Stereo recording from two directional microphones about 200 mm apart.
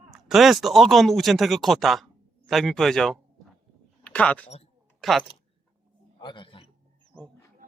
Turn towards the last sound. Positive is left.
turn(degrees=25)  # may be behind; listen again after turning